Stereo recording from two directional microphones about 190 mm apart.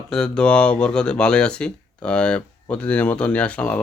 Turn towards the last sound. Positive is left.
turn(degrees=5)  # may be behind; listen again after turning